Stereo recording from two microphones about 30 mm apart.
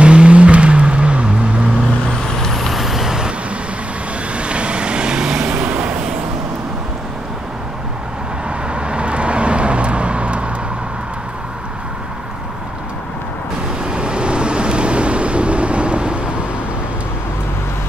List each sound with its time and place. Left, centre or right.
0.0 s vehicle: right
2.5 s vehicle: centre
2.8 s vehicle: centre
3.1 s vehicle: right
4.4 s vehicle: right
8.5 s vehicle: right
13.8 s vehicle: right